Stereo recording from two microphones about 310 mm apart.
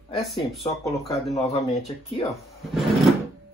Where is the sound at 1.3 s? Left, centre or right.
Centre.